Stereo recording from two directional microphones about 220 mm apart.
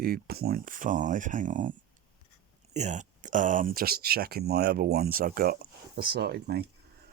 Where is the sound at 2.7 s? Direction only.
30° right (ahead or behind).